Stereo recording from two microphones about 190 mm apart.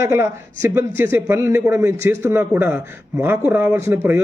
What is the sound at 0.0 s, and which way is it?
A man's voice, 15° right (ahead or behind).